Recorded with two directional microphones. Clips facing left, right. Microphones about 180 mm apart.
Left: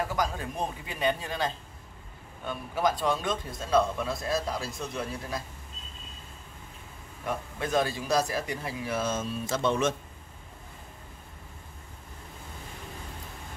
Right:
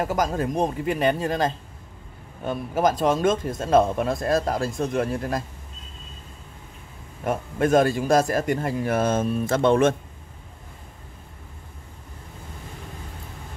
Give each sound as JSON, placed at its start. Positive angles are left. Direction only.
{"t": 0.0, "sound": "a man's voice", "side_deg": -45}
{"t": 7.2, "sound": "a man's voice", "side_deg": -50}